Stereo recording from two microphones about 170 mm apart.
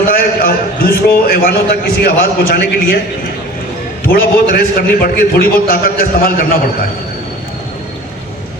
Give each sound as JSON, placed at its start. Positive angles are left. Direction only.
{"t": 0.1, "sound": "a sound", "side_deg": 60}
{"t": 2.0, "sound": "a man's voice", "side_deg": 60}
{"t": 4.1, "sound": "a man's voice", "side_deg": 60}